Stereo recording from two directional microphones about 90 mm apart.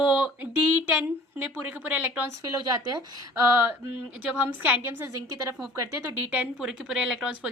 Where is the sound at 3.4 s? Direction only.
25° right (ahead or behind).